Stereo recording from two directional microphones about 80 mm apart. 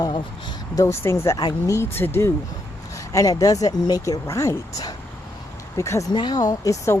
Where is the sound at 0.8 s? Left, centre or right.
Left.